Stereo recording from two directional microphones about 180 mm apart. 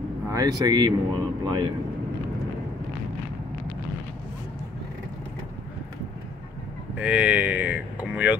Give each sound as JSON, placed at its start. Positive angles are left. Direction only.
{"t": 0.3, "sound": "speech", "side_deg": -20}
{"t": 7.0, "sound": "speech", "side_deg": -5}